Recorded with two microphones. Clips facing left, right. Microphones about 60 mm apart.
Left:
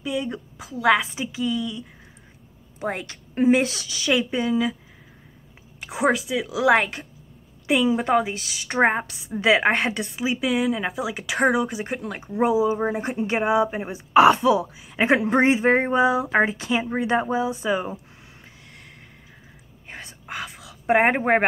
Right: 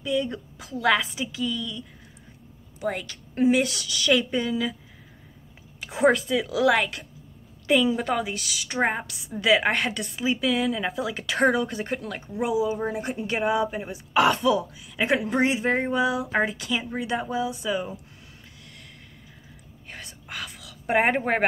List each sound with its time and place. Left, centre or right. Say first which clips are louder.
0.0 s a woman's voice: right 1 dB; centre
4.1 s speech: left 2 dB; centre
5.8 s a sound: left 1 dB; centre
6.0 s speech: right 1 dB; centre
6.7 s a woman's voice: left 4 dB; left
7.6 s a woman's voice: left 1 dB; centre
10.2 s speech: left 1 dB; centre
12.0 s a woman's voice: left 6 dB; left
15.0 s speech: left 4 dB; left
19.9 s whispering: left 4 dB; left